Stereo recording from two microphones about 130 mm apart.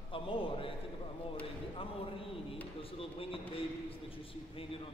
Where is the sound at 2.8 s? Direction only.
45° left (ahead or behind).